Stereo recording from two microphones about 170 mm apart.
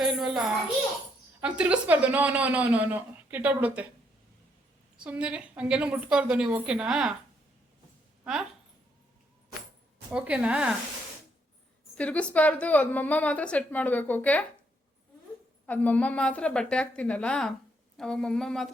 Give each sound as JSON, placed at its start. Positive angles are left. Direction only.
{"t": 0.0, "sound": "a sound", "side_deg": 0}
{"t": 1.4, "sound": "speech", "side_deg": -5}
{"t": 4.9, "sound": "speech", "side_deg": -5}
{"t": 8.2, "sound": "speech", "side_deg": -5}
{"t": 10.1, "sound": "speech", "side_deg": -5}
{"t": 11.9, "sound": "a woman's voice", "side_deg": 10}
{"t": 15.6, "sound": "a woman's voice", "side_deg": 10}